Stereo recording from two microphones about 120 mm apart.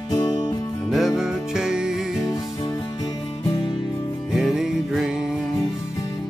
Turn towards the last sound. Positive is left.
turn(degrees=-5)  # may be behind; listen again after turning